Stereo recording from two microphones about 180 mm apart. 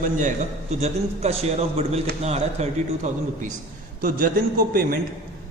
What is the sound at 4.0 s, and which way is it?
Speech, 50° right (ahead or behind).